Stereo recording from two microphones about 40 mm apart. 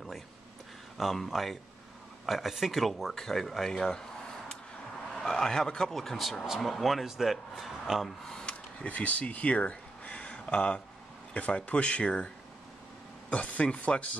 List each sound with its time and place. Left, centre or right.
0.9 s speech: centre
5.1 s speech: centre
8.5 s speech: left
13.3 s speech: left